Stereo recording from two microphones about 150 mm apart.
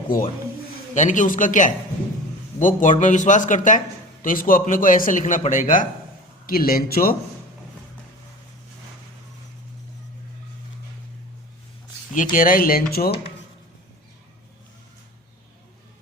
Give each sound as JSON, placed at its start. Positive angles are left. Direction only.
{"t": 0.9, "sound": "a man's voice", "side_deg": 55}
{"t": 6.4, "sound": "speech", "side_deg": 75}
{"t": 12.1, "sound": "speech", "side_deg": 60}